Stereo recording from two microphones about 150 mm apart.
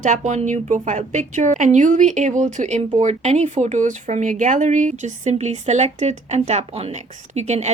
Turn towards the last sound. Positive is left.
turn(degrees=-50)  # may be behind; listen again after turning